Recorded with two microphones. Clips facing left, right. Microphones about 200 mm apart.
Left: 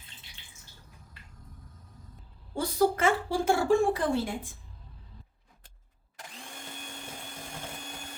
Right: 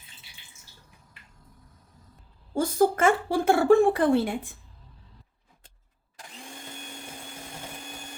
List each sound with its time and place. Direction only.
2.6 s a woman's voice: 50° right (ahead or behind)